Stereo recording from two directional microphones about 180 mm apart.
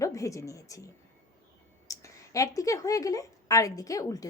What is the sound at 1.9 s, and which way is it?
A woman's voice, 20° left (ahead or behind).